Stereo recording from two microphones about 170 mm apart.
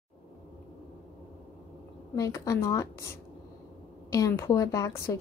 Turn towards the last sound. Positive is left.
turn(degrees=15)  # may be behind; listen again after turning